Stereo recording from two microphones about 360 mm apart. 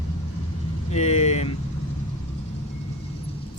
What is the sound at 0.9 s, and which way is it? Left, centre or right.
Speech, centre.